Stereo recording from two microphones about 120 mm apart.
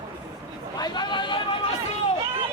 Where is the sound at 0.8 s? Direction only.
40° left (ahead or behind).